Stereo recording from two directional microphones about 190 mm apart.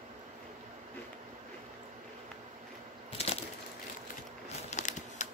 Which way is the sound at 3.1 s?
35° left (ahead or behind).